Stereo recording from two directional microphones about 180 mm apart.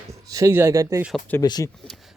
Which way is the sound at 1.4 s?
20° left (ahead or behind).